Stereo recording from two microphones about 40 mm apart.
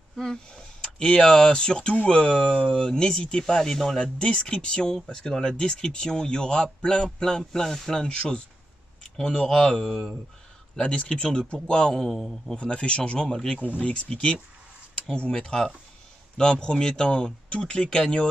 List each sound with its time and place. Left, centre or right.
0.1 s speech: centre
4.0 s speech: left
9.8 s speech: centre
11.0 s speech: left
12.5 s speech: left